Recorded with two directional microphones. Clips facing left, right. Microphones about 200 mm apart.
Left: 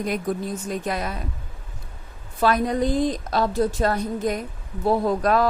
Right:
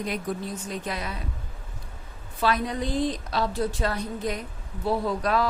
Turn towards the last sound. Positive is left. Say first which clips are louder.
# left 5 dB
turn(degrees=45)  # may be behind; listen again after turning